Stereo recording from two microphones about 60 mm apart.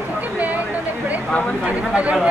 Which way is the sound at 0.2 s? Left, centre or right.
Right.